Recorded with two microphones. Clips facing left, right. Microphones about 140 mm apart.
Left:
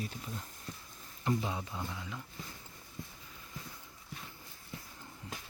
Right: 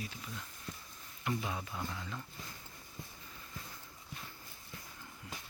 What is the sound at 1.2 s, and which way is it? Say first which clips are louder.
Speech: left 4 dB; 25° left (ahead or behind).